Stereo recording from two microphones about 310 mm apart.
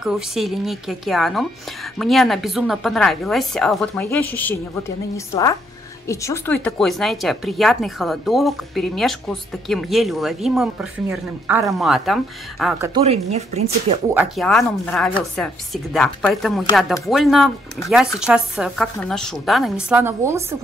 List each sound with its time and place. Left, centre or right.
0.0 s speech: centre
12.9 s speech: centre
14.1 s speech: centre